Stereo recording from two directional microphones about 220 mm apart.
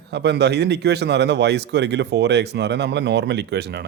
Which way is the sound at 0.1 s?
50° right (ahead or behind).